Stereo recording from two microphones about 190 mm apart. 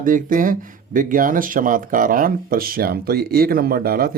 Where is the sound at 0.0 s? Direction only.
45° right (ahead or behind).